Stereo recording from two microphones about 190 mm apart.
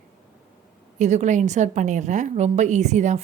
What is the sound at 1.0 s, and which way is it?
A woman's voice, 40° right (ahead or behind).